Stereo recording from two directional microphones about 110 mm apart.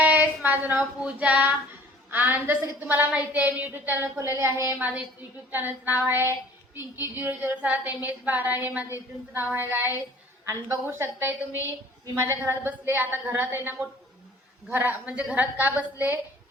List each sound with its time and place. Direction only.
0.0 s music: 15° right (ahead or behind)
2.0 s a woman's voice: 15° right (ahead or behind)